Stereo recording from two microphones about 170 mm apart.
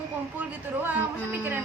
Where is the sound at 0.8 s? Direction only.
15° right (ahead or behind).